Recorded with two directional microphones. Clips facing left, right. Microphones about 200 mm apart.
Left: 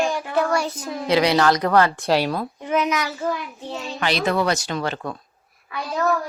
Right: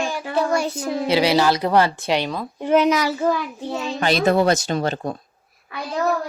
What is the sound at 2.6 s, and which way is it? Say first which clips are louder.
Speech: right 6 dB; 30° right (ahead or behind).